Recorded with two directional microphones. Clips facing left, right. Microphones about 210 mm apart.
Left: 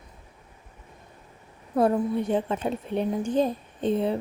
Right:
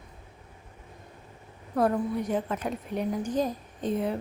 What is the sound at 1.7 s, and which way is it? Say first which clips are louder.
A woman's voice: left 3 dB; 25° left (ahead or behind).